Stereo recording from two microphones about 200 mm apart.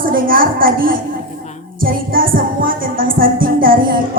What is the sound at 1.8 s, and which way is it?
Music, 45° right (ahead or behind).